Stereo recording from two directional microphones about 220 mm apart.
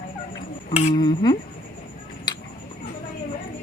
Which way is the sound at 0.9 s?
20° left (ahead or behind).